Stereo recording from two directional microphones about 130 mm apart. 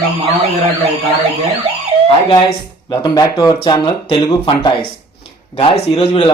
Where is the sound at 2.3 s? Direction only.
35° left (ahead or behind).